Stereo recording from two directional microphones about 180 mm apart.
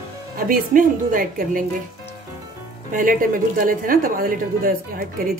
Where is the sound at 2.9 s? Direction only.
50° right (ahead or behind).